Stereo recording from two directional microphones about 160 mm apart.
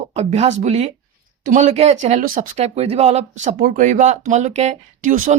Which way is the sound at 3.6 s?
55° right (ahead or behind).